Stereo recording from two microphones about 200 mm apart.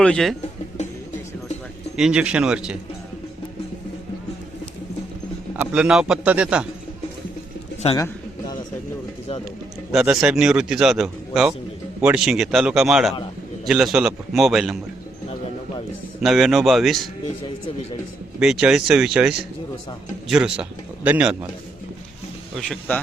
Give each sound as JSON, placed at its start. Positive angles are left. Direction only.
{"t": 0.0, "sound": "a man's voice", "side_deg": 5}
{"t": 2.0, "sound": "a man's voice", "side_deg": -5}
{"t": 5.5, "sound": "a man's voice", "side_deg": -5}
{"t": 7.9, "sound": "a sound", "side_deg": 20}
{"t": 9.9, "sound": "a man's voice", "side_deg": -5}
{"t": 16.2, "sound": "a man's voice", "side_deg": 0}
{"t": 18.3, "sound": "a man's voice", "side_deg": -5}
{"t": 22.5, "sound": "a man's voice", "side_deg": 5}